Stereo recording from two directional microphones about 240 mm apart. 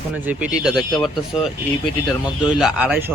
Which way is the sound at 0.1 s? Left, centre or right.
Centre.